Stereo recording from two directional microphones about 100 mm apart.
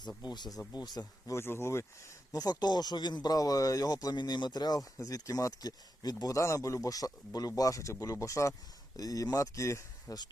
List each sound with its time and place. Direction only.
0.2 s speech: 45° left (ahead or behind)
1.4 s speech: 25° left (ahead or behind)
2.3 s speech: 40° left (ahead or behind)